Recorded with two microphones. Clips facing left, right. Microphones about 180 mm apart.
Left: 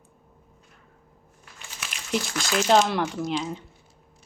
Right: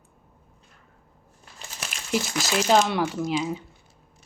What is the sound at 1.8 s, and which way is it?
Crumpling, 35° right (ahead or behind).